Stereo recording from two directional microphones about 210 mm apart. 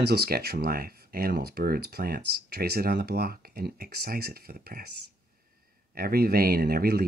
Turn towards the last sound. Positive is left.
turn(degrees=-45)  # may be behind; listen again after turning